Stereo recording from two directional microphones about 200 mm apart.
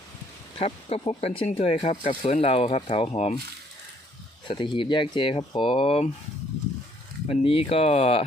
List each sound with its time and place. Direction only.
0.6 s speech: 30° left (ahead or behind)
4.4 s speech: 25° left (ahead or behind)
7.4 s speech: 30° left (ahead or behind)